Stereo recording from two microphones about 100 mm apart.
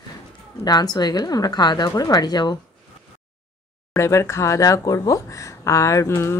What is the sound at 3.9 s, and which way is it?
Speech, 30° left (ahead or behind).